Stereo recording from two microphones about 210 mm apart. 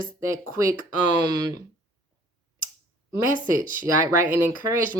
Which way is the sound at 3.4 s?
40° right (ahead or behind).